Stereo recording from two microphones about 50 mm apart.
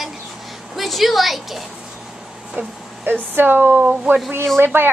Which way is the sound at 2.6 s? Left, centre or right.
Right.